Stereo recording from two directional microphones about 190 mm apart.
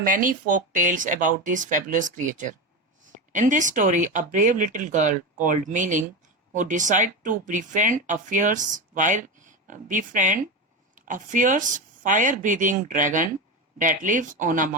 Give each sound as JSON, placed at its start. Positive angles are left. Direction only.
{"t": 0.0, "sound": "speech", "side_deg": -45}